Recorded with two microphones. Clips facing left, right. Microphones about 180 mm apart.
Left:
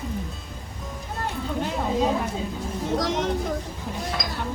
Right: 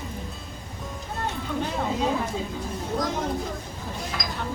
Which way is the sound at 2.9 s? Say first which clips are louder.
Left 2 dB; 85° left.